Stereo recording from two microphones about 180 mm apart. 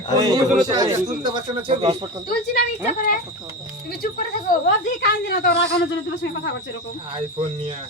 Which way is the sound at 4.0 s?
55° left (ahead or behind).